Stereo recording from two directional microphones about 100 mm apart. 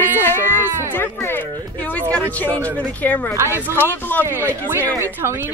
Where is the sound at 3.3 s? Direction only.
25° right (ahead or behind).